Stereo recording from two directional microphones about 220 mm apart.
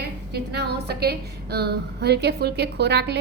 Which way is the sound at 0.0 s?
45° right (ahead or behind).